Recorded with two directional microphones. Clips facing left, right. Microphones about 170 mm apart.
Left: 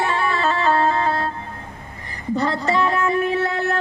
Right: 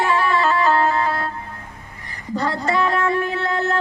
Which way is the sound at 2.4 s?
20° left (ahead or behind).